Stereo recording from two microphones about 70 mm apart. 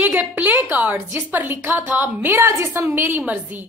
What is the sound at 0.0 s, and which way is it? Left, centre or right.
A woman's voice, right.